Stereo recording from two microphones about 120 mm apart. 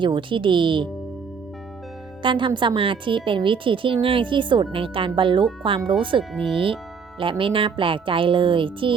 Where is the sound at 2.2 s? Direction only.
45° right (ahead or behind).